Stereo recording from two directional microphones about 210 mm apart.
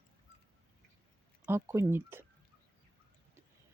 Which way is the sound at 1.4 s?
10° right (ahead or behind).